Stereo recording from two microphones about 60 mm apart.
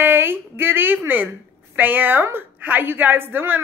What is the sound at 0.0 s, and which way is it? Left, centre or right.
A woman's voice, right.